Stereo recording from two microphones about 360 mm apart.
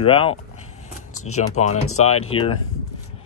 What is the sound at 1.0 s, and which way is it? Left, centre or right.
Keys jangling, left.